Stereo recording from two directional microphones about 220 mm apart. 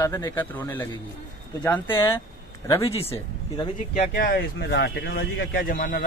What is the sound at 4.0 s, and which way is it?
Speech, 40° left (ahead or behind).